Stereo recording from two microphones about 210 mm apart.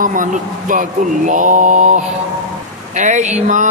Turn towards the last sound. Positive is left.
turn(degrees=-35)  # may be behind; listen again after turning